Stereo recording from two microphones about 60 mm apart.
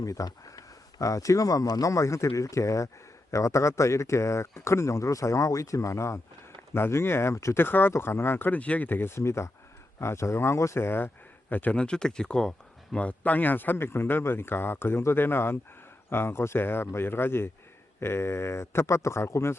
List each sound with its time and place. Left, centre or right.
0.0 s speech: left
6.7 s speech: left
7.6 s speech: left
8.5 s speech: left
11.8 s speech: centre; by 19.5 s left